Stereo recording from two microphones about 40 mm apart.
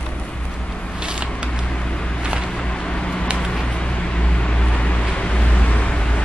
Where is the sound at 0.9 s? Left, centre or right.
Right.